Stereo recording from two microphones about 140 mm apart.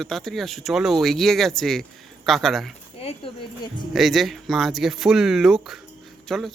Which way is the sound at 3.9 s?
Centre (ahead or behind).